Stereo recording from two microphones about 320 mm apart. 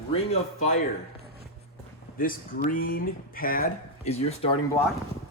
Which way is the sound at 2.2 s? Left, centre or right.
Left.